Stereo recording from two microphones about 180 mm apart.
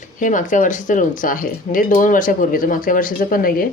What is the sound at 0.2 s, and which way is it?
Cutlery, 45° left (ahead or behind).